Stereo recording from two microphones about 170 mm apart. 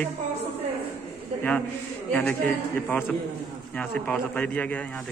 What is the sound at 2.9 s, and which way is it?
A man's voice, 10° left (ahead or behind).